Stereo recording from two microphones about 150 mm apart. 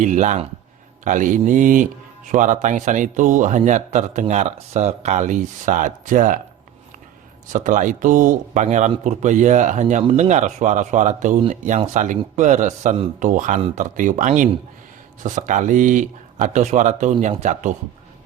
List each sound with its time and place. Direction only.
0.0 s a man's voice: 55° right (ahead or behind)
7.4 s a man's voice: 60° right (ahead or behind)